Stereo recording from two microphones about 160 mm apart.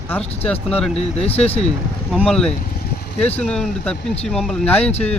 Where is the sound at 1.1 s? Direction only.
40° left (ahead or behind).